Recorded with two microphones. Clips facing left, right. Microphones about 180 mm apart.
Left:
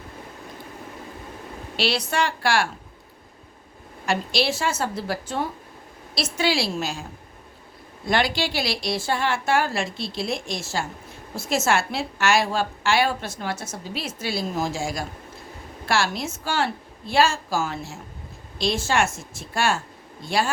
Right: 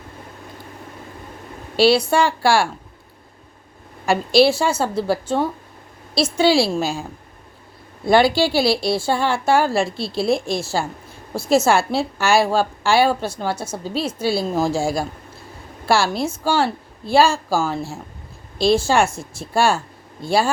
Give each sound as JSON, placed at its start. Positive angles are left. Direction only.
{"t": 2.0, "sound": "a woman's voice", "side_deg": -30}
{"t": 4.4, "sound": "a woman's voice", "side_deg": -30}
{"t": 8.0, "sound": "a woman's voice", "side_deg": -30}